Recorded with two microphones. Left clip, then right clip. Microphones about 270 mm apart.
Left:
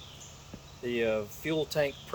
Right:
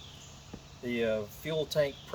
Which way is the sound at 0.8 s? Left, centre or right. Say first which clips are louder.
Left 2 dB; centre.